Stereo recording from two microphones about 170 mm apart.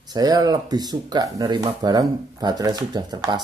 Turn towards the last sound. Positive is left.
turn(degrees=-25)  # may be behind; listen again after turning